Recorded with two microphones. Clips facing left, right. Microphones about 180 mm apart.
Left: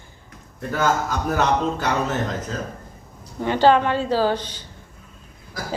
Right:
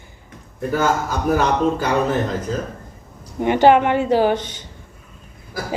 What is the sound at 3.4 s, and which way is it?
A woman's voice, 15° right (ahead or behind).